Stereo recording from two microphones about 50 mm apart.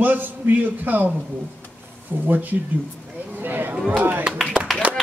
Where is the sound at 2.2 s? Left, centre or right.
Right.